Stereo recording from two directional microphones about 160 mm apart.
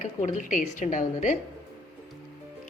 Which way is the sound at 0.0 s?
50° left (ahead or behind).